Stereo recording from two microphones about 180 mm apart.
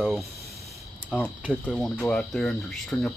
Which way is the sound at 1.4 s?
10° right (ahead or behind).